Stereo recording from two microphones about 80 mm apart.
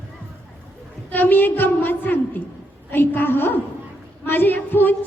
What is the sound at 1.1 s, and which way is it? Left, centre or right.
A woman's voice, left.